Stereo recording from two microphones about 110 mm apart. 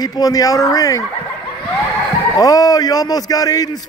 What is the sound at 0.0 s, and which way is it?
A man's voice, 35° left (ahead or behind).